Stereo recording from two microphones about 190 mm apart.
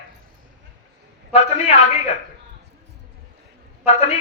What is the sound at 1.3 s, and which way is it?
Speech, 35° left (ahead or behind).